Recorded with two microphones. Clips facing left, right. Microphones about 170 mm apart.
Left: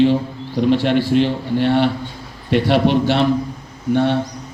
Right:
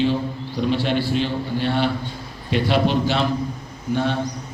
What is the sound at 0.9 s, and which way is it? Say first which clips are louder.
A man's voice: left 6 dB; 75° left (ahead or behind).